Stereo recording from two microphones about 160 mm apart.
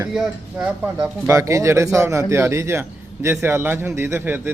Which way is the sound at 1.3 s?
20° right (ahead or behind).